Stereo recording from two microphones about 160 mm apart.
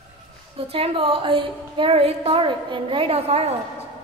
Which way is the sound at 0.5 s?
35° right (ahead or behind).